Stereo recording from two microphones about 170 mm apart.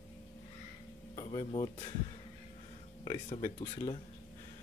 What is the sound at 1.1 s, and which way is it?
Speech, 25° left (ahead or behind).